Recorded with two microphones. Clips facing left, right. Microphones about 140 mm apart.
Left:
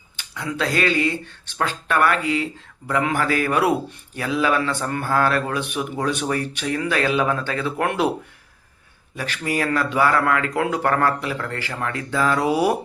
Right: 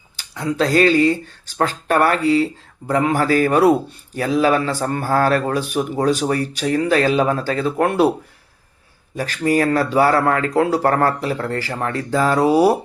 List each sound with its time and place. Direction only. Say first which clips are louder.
0.2 s a man's voice: right 6 dB; 40° right (ahead or behind)
9.1 s a man's voice: right 7 dB; 40° right (ahead or behind)